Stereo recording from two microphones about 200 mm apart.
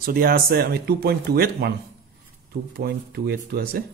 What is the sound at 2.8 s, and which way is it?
Speech, 50° right (ahead or behind).